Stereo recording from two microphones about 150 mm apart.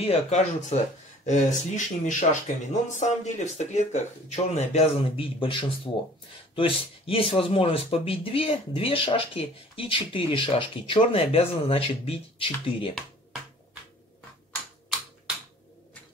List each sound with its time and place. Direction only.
0.0 s speech: 45° left (ahead or behind)